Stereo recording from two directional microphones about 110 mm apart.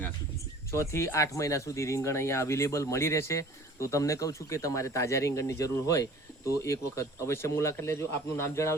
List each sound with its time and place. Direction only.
0.7 s speech: 25° left (ahead or behind)